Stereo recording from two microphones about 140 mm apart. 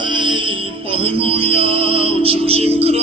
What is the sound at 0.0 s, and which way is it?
Music, 35° right (ahead or behind).